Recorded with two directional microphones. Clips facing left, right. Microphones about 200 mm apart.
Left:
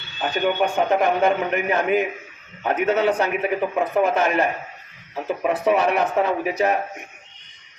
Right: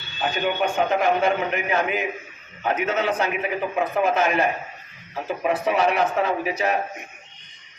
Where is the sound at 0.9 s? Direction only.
55° left (ahead or behind).